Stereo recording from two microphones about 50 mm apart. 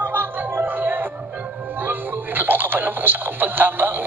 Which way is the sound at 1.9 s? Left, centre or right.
Right.